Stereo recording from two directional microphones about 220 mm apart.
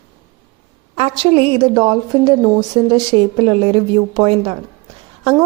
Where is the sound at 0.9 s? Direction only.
25° right (ahead or behind).